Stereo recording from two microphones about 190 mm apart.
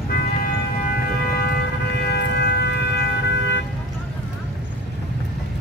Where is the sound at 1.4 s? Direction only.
55° left (ahead or behind).